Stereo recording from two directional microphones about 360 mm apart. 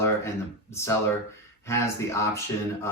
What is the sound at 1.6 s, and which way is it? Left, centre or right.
Speech, centre.